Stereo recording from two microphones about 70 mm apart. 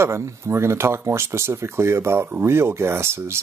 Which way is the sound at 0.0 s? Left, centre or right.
Right.